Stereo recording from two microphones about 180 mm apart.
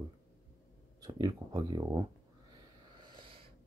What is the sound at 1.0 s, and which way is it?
Speech, 20° right (ahead or behind).